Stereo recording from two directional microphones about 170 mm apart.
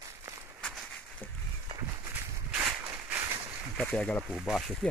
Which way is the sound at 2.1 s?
10° right (ahead or behind).